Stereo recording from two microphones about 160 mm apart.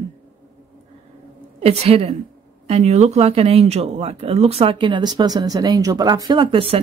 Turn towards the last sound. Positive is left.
turn(degrees=-35)  # may be behind; listen again after turning